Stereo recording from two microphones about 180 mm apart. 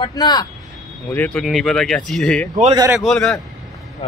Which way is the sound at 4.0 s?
35° left (ahead or behind).